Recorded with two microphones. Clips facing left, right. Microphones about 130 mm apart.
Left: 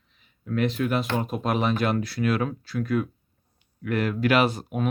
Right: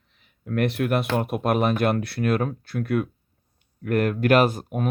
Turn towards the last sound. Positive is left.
turn(degrees=-45)  # may be behind; listen again after turning